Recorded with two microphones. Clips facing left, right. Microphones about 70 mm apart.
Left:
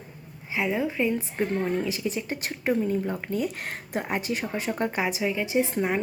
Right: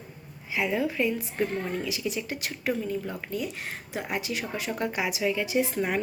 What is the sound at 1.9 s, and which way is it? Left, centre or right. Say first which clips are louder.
Speech: left 2 dB; left.